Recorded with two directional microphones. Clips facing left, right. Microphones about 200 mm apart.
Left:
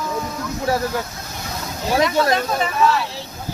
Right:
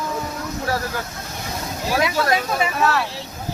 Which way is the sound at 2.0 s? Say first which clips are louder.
Left 3 dB; 5° right (ahead or behind).